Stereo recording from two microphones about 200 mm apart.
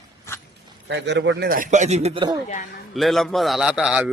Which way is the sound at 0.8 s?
60° right (ahead or behind).